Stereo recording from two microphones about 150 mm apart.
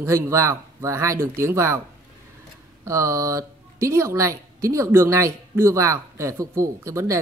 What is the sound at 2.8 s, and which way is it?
A man's voice, 20° right (ahead or behind).